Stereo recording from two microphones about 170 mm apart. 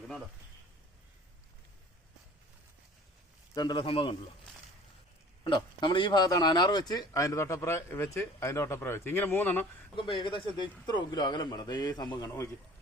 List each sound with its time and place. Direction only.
3.5 s a man's voice: 25° left (ahead or behind)
5.4 s speech: 25° left (ahead or behind); by 9.6 s 10° left (ahead or behind)
9.9 s a man's voice: 30° left (ahead or behind)